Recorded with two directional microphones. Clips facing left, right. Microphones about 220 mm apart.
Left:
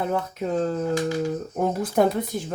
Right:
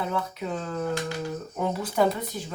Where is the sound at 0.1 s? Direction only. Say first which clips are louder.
Left 5 dB; 40° left (ahead or behind).